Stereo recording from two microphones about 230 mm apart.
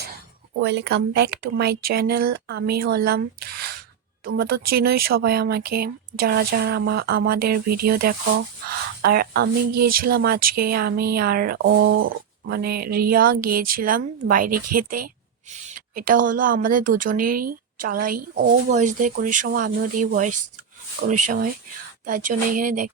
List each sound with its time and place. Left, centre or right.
0.6 s speech: right
11.6 s speech: right